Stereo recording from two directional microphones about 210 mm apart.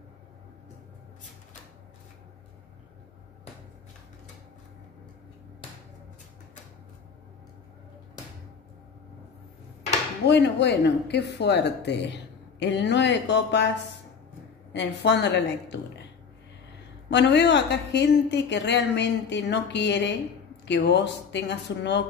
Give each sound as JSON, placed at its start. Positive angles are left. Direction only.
{"t": 10.2, "sound": "speech", "side_deg": 55}
{"t": 14.7, "sound": "speech", "side_deg": 55}
{"t": 17.1, "sound": "speech", "side_deg": 55}